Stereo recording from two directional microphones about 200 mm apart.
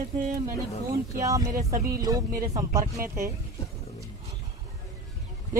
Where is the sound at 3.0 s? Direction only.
45° right (ahead or behind).